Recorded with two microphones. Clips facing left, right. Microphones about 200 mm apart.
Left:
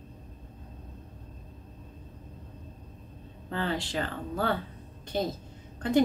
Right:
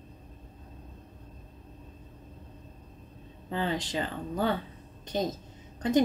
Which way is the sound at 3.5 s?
20° right (ahead or behind).